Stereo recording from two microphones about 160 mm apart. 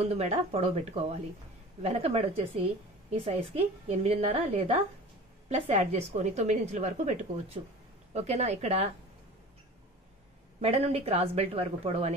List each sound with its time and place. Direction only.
0.0 s a woman's voice: 40° right (ahead or behind)
10.6 s a woman's voice: 40° right (ahead or behind)